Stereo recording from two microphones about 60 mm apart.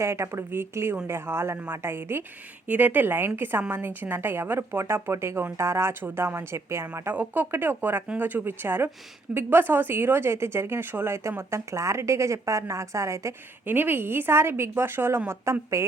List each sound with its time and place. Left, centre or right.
0.0 s a woman's voice: right
2.6 s a woman's voice: right
7.1 s a woman's voice: right
13.7 s speech: right
15.5 s a woman's voice: right